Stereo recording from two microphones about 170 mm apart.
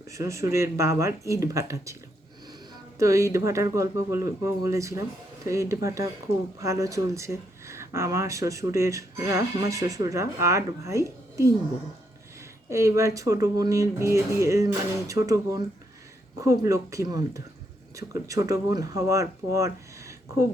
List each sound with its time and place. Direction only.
0.1 s speech: 20° right (ahead or behind)
3.0 s speech: 20° right (ahead or behind)
12.7 s speech: 15° right (ahead or behind)